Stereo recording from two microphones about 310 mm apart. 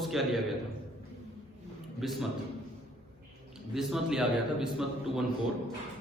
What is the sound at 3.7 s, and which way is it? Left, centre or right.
A man's voice, centre.